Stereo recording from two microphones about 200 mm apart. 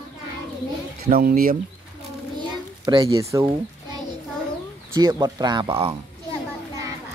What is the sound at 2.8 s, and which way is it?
Speech, 20° right (ahead or behind).